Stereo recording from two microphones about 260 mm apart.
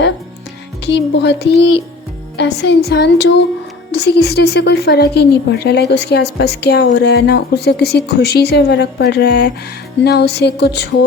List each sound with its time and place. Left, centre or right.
0.9 s a woman's voice: left